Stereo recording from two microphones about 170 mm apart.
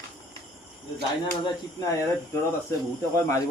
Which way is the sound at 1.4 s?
20° left (ahead or behind).